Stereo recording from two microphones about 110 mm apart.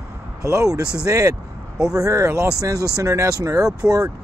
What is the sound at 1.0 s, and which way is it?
Speech, 30° right (ahead or behind).